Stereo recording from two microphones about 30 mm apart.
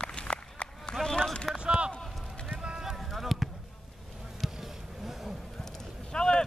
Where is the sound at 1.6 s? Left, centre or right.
Right.